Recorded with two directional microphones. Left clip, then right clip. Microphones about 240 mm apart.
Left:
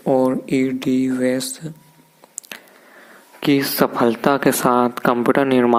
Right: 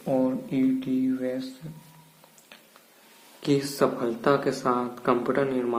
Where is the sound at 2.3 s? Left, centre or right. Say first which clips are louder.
Left 16 dB; left.